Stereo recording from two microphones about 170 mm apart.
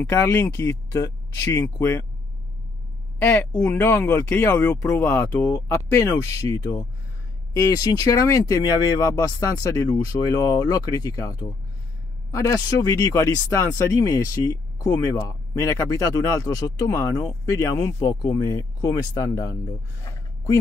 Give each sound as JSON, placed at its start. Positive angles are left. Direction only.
{"t": 0.0, "sound": "speech", "side_deg": 15}
{"t": 3.2, "sound": "speech", "side_deg": 10}